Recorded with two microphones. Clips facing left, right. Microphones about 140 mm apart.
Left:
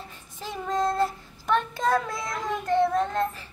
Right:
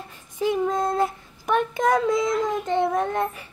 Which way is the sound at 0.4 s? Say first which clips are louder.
Right 5 dB; 10° right (ahead or behind).